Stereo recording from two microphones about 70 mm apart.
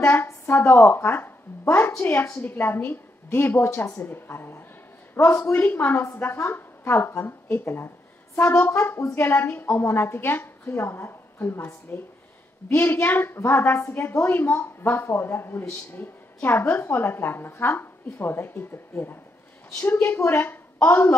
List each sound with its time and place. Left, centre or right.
0.0 s a woman's voice: left